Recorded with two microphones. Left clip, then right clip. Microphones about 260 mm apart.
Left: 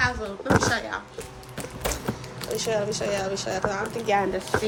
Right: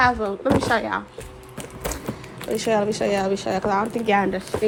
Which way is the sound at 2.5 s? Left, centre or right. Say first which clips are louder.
Right 5 dB; right.